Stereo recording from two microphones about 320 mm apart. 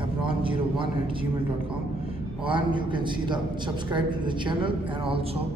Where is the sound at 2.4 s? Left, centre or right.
Centre.